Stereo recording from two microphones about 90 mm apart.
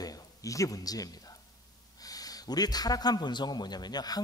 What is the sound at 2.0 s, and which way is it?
A man's voice, 45° left (ahead or behind).